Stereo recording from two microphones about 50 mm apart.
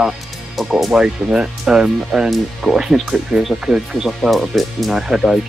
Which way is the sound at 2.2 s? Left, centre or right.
Centre.